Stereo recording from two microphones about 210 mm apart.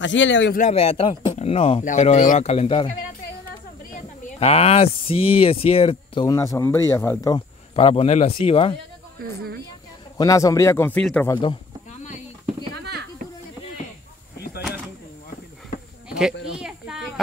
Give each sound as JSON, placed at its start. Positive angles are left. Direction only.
{"t": 0.0, "sound": "a man's voice", "side_deg": 60}
{"t": 0.6, "sound": "speech", "side_deg": 30}
{"t": 4.4, "sound": "speech", "side_deg": 30}
{"t": 6.2, "sound": "speech", "side_deg": 15}
{"t": 7.7, "sound": "speech", "side_deg": 25}
{"t": 10.1, "sound": "speech", "side_deg": 15}
{"t": 12.8, "sound": "a sound", "side_deg": -50}
{"t": 16.5, "sound": "a sound", "side_deg": -5}